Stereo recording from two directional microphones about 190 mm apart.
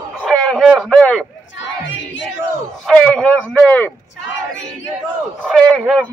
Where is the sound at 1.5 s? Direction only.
75° left (ahead or behind).